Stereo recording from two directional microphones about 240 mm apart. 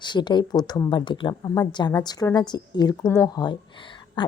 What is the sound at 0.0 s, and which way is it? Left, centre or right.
Speech, centre.